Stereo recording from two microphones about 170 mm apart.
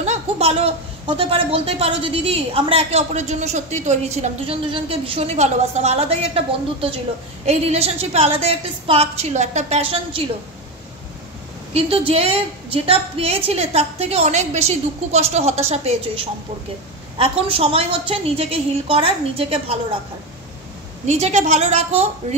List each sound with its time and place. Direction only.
0.0 s speech: 40° right (ahead or behind)
11.7 s speech: 35° right (ahead or behind)
21.0 s speech: 40° right (ahead or behind)